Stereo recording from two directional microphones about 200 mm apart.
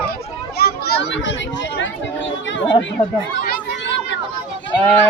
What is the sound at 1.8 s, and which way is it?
Chatter, 70° left (ahead or behind).